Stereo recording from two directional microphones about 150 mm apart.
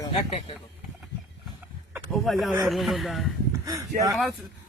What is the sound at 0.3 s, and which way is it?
Speech, 40° left (ahead or behind).